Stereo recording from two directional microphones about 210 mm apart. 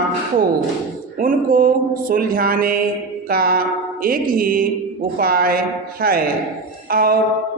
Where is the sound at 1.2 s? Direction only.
40° right (ahead or behind).